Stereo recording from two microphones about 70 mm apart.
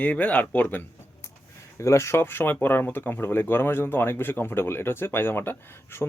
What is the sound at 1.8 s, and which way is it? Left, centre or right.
Speech, left.